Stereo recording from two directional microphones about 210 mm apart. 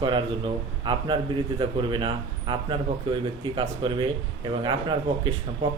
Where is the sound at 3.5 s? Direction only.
25° right (ahead or behind).